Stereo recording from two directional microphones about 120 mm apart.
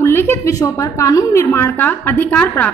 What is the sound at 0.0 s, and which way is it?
A woman's voice, 20° left (ahead or behind).